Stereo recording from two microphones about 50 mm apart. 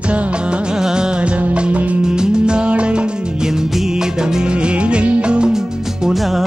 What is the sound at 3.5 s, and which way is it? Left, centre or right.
Music of bollywood, centre.